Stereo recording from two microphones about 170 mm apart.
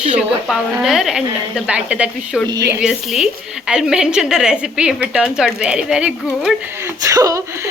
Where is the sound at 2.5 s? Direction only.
20° right (ahead or behind).